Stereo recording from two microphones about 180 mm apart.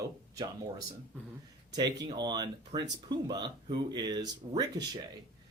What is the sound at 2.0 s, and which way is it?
Speech, 25° right (ahead or behind).